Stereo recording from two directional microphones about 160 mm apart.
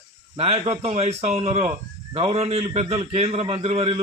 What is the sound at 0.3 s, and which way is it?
A man's voice, 40° right (ahead or behind).